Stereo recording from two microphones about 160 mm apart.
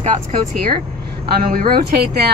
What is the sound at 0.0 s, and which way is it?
Speech, 50° right (ahead or behind).